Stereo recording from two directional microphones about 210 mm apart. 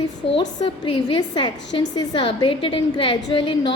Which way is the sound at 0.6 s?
25° left (ahead or behind).